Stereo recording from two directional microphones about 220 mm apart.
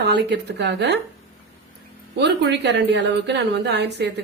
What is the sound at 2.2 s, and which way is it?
A woman's voice, 50° right (ahead or behind).